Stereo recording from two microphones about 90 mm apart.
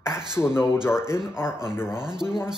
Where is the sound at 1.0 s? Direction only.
30° left (ahead or behind).